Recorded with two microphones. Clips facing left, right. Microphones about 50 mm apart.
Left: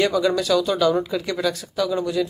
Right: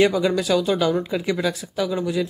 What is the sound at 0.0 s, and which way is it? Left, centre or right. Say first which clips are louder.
Speech: right 1 dB; centre.